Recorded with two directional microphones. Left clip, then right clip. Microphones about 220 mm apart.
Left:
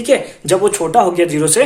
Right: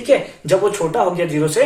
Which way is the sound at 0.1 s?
45° left (ahead or behind).